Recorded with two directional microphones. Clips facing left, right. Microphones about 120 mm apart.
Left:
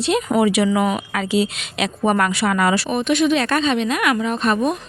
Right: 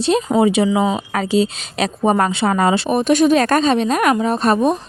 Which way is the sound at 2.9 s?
40° right (ahead or behind).